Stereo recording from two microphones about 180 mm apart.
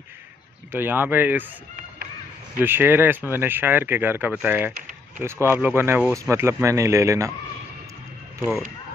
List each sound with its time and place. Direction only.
0.7 s speech: 10° right (ahead or behind)
2.6 s speech: 10° right (ahead or behind)
8.4 s speech: centre (ahead or behind)